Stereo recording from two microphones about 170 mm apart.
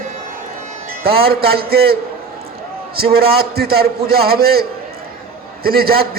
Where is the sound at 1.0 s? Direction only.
65° right (ahead or behind).